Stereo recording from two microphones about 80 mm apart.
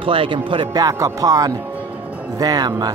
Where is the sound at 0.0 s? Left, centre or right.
Right.